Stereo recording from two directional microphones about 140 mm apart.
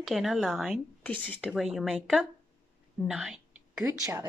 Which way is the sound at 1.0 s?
10° left (ahead or behind).